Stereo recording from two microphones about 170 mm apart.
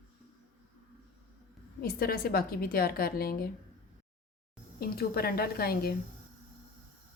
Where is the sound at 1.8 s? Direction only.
60° left (ahead or behind).